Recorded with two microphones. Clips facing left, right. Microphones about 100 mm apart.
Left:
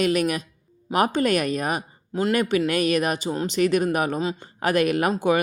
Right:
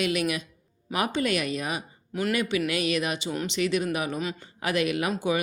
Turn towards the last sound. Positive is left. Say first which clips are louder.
# left 5 dB
turn(degrees=50)  # may be behind; listen again after turning